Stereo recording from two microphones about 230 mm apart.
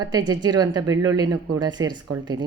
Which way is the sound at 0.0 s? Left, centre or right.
Centre.